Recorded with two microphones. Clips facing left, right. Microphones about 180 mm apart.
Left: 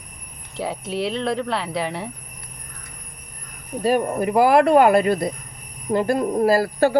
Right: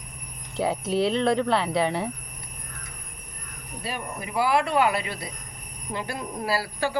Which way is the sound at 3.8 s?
45° left (ahead or behind).